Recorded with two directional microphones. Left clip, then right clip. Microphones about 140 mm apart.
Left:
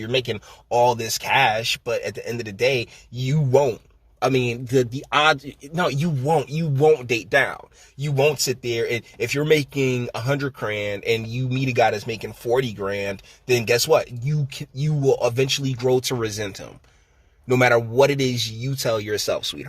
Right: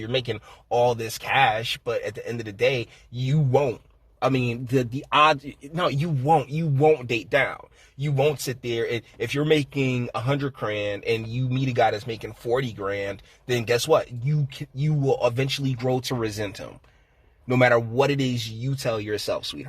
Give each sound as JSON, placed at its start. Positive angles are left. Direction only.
{"t": 0.0, "sound": "a man's voice", "side_deg": 15}
{"t": 17.5, "sound": "speech", "side_deg": 15}